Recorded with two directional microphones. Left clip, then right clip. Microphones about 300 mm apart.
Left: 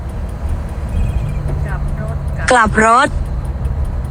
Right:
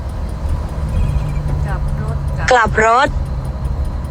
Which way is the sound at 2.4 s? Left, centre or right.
Centre.